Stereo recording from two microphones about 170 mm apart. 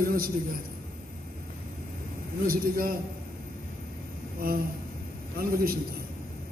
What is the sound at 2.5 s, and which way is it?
Speech, 60° right (ahead or behind).